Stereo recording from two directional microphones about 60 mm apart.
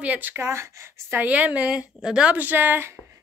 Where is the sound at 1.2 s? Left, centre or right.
Right.